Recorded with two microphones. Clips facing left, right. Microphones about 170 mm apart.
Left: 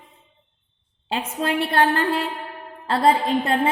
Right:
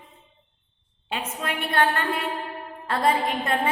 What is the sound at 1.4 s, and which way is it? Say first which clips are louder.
A woman's voice: left 4 dB; 30° left (ahead or behind).